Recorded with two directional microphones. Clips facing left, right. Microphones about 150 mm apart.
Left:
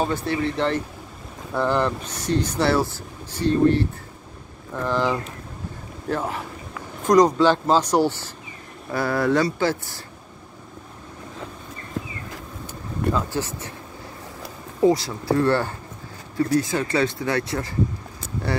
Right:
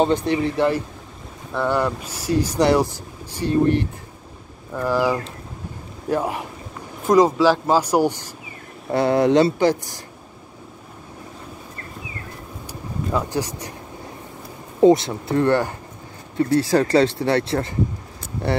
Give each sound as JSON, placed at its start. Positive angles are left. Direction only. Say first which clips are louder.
{"t": 0.0, "sound": "speech", "louder": "right 5 dB", "side_deg": -20}
{"t": 13.1, "sound": "speech", "louder": "right 4 dB", "side_deg": -15}
{"t": 14.8, "sound": "speech", "louder": "right 5 dB", "side_deg": -20}
{"t": 16.3, "sound": "speech", "louder": "right 4 dB", "side_deg": -30}